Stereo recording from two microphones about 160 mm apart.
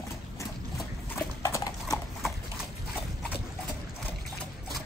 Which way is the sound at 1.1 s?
20° left (ahead or behind).